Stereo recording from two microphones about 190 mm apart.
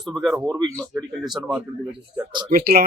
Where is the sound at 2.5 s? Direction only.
50° right (ahead or behind).